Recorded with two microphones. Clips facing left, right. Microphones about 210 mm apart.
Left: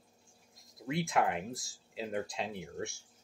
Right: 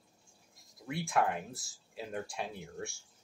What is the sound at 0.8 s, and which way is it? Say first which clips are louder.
Speech: left 1 dB; 20° left (ahead or behind).